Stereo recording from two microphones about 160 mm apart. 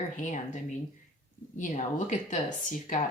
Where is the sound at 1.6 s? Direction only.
50° left (ahead or behind).